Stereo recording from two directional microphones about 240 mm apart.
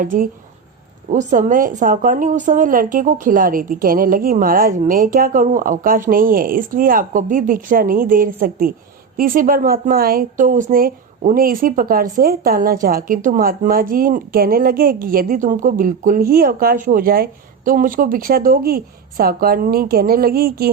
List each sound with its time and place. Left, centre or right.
0.0 s a woman's voice: right